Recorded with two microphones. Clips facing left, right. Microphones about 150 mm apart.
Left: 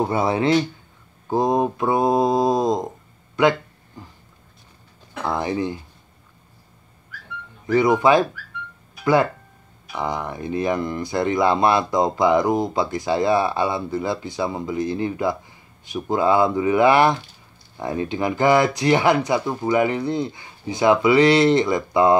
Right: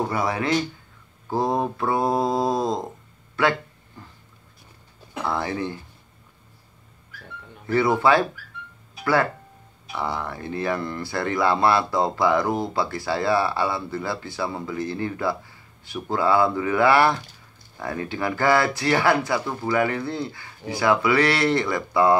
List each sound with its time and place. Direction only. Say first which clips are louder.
0.0 s speech: left 5 dB; 25° left (ahead or behind)
1.3 s mantra: left 4 dB; 20° left (ahead or behind)
5.2 s mantra: left 3 dB; 20° left (ahead or behind)
7.6 s mantra: left 3 dB; 15° left (ahead or behind)
9.0 s speech: left 4 dB; 20° left (ahead or behind)